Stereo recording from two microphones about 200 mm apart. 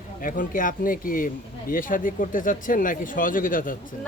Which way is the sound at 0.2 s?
40° left (ahead or behind).